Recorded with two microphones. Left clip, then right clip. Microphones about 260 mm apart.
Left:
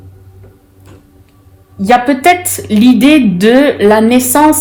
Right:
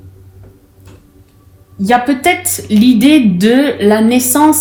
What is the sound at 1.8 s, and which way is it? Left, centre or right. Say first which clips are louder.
Speech: left 3 dB; left.